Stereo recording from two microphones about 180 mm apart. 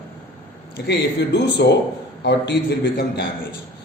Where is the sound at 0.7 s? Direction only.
65° left (ahead or behind).